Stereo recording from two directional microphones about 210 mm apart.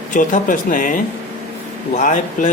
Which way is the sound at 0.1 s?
40° left (ahead or behind).